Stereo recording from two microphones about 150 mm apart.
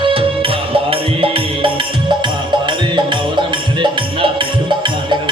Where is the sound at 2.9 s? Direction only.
30° right (ahead or behind).